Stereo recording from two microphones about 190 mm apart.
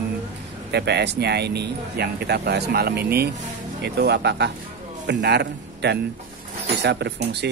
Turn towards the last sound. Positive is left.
turn(degrees=-60)  # may be behind; listen again after turning